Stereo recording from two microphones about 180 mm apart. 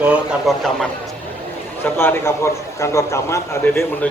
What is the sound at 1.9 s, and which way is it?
A man's voice, 15° left (ahead or behind).